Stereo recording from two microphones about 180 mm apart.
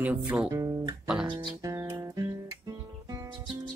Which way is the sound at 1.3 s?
25° right (ahead or behind).